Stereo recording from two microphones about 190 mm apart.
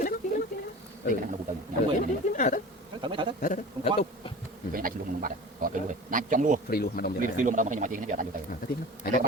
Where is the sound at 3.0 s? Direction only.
25° right (ahead or behind).